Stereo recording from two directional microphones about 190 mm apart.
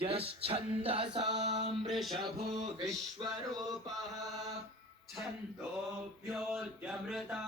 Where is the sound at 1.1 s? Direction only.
65° right (ahead or behind).